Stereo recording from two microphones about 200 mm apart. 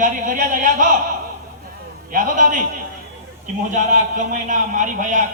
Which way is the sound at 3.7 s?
40° right (ahead or behind).